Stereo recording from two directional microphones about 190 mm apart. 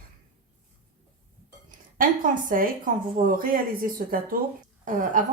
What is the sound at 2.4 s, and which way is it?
Speech, 45° right (ahead or behind).